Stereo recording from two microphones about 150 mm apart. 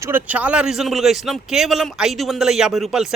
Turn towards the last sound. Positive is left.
turn(degrees=-5)  # may be behind; listen again after turning